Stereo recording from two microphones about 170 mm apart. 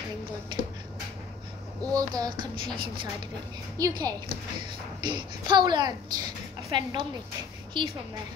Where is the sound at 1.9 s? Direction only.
20° right (ahead or behind).